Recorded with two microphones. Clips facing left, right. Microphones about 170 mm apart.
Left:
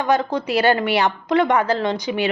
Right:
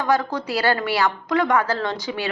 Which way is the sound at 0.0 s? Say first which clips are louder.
Left 2 dB; 20° left (ahead or behind).